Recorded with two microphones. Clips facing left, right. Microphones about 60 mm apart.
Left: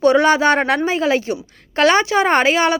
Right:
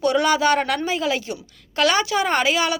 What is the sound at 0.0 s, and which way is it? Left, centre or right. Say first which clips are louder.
A woman's voice: left 5 dB; left.